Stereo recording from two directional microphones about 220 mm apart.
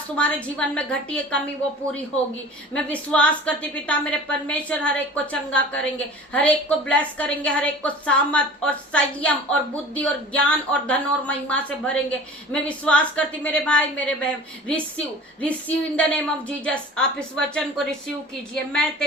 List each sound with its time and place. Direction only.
0.2 s a woman's voice: 5° left (ahead or behind)
2.7 s a woman's voice: 5° left (ahead or behind)